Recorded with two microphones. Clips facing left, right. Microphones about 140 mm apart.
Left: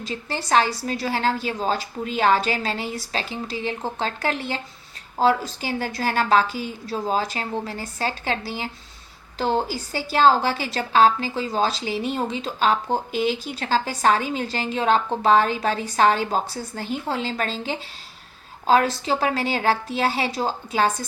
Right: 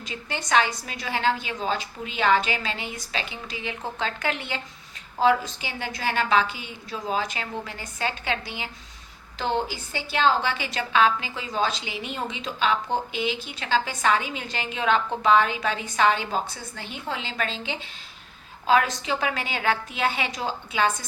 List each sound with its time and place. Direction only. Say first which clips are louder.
0.0 s a woman's voice: left 4 dB; 35° left (ahead or behind)